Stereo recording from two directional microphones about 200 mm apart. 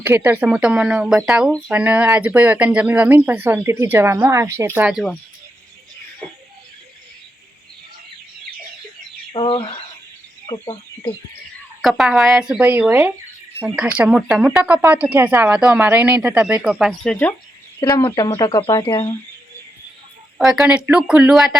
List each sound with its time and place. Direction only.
0.0 s speech: 10° right (ahead or behind)
9.3 s speech: 25° left (ahead or behind)
11.8 s speech: centre (ahead or behind)
17.7 s speech: 20° left (ahead or behind)
20.4 s speech: centre (ahead or behind)